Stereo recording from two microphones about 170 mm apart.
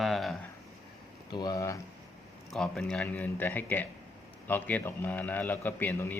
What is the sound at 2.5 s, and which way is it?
Speech, centre (ahead or behind).